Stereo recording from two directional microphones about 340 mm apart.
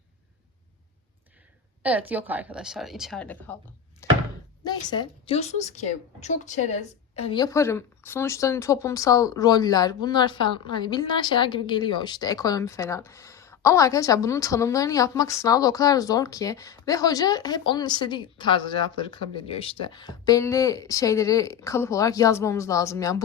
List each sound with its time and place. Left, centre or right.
1.8 s speech: centre
4.0 s thunk: centre
4.6 s a woman's voice: centre